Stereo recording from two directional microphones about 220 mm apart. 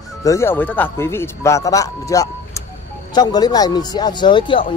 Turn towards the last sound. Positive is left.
turn(degrees=20)  # may be behind; listen again after turning